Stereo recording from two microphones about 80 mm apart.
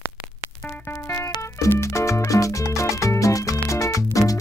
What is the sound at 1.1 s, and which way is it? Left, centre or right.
Music, left.